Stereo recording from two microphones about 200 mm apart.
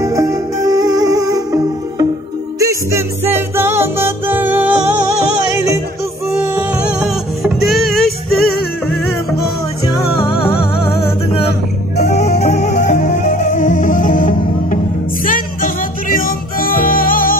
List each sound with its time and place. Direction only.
0.0 s music: 15° right (ahead or behind)
6.3 s music: 5° right (ahead or behind)
9.9 s music: 25° left (ahead or behind)
12.0 s music: 35° left (ahead or behind)